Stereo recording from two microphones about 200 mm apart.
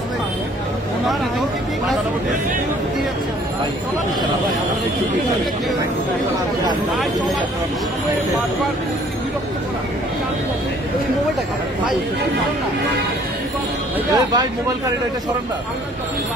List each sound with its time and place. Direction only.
14.1 s speech: 20° right (ahead or behind)